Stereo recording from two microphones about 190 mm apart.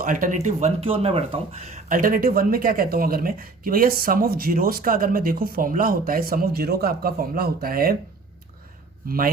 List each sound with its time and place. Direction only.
0.0 s speech: 45° right (ahead or behind)
1.9 s speech: 45° right (ahead or behind)
9.0 s speech: 50° right (ahead or behind)